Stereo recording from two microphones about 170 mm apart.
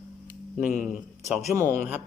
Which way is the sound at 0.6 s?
50° left (ahead or behind).